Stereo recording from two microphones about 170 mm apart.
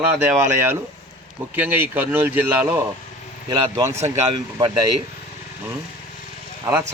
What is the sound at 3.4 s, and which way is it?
Speech, 20° right (ahead or behind).